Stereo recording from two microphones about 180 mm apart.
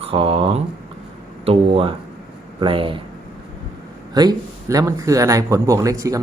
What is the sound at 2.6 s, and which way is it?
Speech, 30° right (ahead or behind).